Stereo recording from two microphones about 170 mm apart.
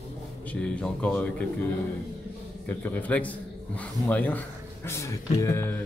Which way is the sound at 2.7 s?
10° left (ahead or behind).